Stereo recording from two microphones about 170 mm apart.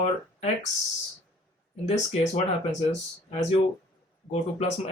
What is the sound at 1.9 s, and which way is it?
Speech, 40° left (ahead or behind).